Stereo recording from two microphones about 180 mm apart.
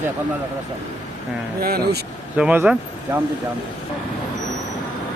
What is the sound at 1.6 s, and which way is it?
Speech, 60° right (ahead or behind).